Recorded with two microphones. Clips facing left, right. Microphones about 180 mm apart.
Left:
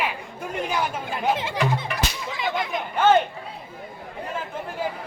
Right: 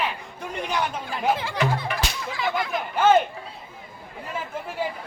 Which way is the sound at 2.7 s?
Centre (ahead or behind).